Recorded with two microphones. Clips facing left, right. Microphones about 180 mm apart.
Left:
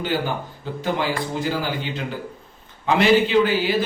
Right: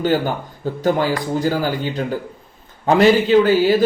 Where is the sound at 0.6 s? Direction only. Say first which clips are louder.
Right 7 dB; 45° right (ahead or behind).